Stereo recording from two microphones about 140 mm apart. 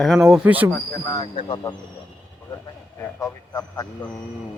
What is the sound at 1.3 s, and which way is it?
Speech, 35° left (ahead or behind).